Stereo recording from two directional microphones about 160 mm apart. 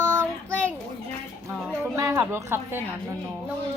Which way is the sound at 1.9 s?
20° right (ahead or behind).